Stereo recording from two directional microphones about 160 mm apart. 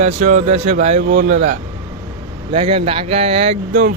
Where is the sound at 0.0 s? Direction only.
50° right (ahead or behind).